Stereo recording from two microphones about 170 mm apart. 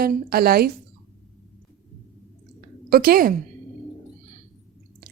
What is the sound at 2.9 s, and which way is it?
Speech, 60° right (ahead or behind).